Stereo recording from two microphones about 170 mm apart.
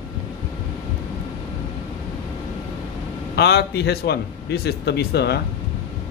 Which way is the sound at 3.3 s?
75° left (ahead or behind).